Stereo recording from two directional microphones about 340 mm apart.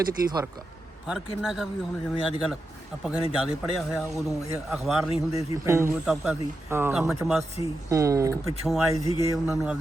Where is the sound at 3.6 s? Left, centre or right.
Centre.